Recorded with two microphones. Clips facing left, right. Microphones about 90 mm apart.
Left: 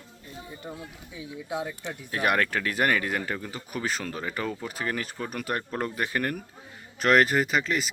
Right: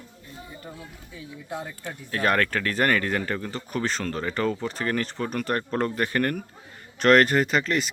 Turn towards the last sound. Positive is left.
turn(degrees=5)  # may be behind; listen again after turning